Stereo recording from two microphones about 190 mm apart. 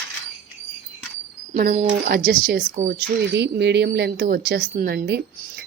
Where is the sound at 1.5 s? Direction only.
45° right (ahead or behind).